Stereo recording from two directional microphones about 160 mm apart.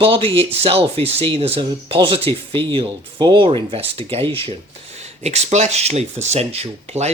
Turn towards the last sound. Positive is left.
turn(degrees=-40)  # may be behind; listen again after turning